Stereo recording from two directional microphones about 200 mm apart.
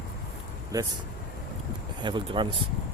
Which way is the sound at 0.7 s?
20° right (ahead or behind).